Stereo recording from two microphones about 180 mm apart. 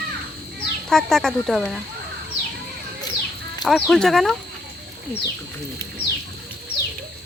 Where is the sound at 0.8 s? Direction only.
5° left (ahead or behind).